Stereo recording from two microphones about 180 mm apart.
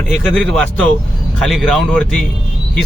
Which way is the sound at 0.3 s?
5° left (ahead or behind).